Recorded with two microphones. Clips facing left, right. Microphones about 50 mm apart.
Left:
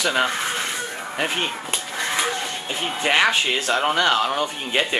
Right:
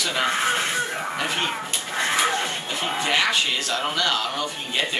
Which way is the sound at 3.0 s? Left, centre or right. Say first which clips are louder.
Left 4 dB; left.